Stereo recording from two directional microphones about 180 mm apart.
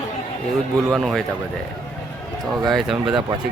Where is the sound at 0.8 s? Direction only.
Centre (ahead or behind).